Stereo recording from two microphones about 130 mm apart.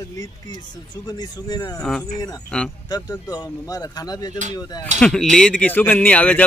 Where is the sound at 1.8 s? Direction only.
5° left (ahead or behind).